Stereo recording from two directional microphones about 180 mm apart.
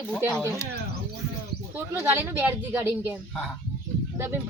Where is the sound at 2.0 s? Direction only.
10° right (ahead or behind).